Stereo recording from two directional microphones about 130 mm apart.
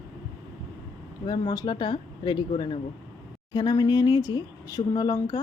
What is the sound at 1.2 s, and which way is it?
A woman's voice, 30° left (ahead or behind).